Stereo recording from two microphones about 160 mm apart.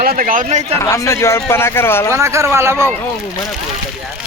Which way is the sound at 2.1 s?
15° right (ahead or behind).